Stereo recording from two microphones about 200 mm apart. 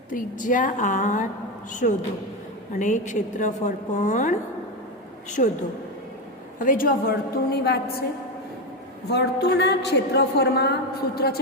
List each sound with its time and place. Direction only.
0.1 s a woman's voice: 40° left (ahead or behind)
5.4 s a woman's voice: 40° left (ahead or behind)
6.7 s a woman's voice: 45° left (ahead or behind)
9.1 s a woman's voice: 60° left (ahead or behind)